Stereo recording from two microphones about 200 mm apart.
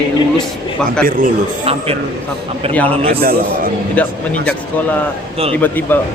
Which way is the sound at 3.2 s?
45° right (ahead or behind).